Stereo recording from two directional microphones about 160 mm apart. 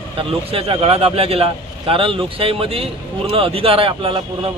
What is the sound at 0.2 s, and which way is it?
A man's voice, 35° right (ahead or behind).